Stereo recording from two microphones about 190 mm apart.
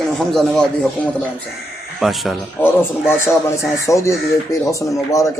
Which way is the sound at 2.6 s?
10° left (ahead or behind).